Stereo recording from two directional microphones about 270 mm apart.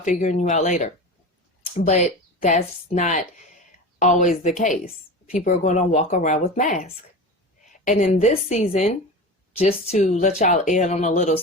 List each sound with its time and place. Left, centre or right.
0.0 s a woman's voice: left